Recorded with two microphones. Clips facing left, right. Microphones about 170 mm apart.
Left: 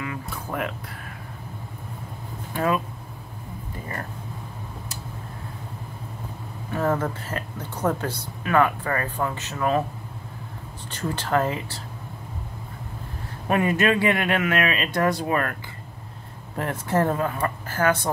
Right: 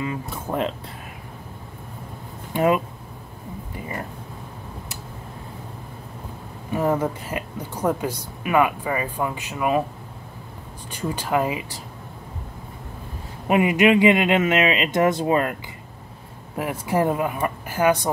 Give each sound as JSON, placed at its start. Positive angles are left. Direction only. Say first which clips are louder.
{"t": 0.0, "sound": "speech", "louder": "right 4 dB", "side_deg": -20}
{"t": 2.5, "sound": "speech", "louder": "right 4 dB", "side_deg": -20}
{"t": 6.7, "sound": "speech", "louder": "right 2 dB", "side_deg": -15}
{"t": 10.9, "sound": "speech", "louder": "right 1 dB", "side_deg": -10}
{"t": 13.5, "sound": "speech", "louder": "right 4 dB", "side_deg": -15}
{"t": 16.5, "sound": "speech", "louder": "right 1 dB", "side_deg": -10}